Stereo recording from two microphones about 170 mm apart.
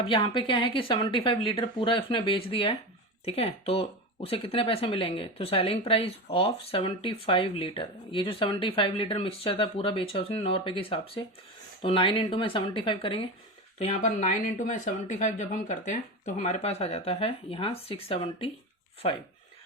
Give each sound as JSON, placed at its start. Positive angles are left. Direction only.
{"t": 0.0, "sound": "speech", "side_deg": 30}
{"t": 13.7, "sound": "speech", "side_deg": 45}